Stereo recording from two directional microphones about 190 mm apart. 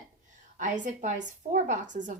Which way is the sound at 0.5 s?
40° right (ahead or behind).